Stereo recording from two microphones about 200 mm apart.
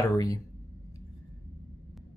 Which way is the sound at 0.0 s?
15° left (ahead or behind).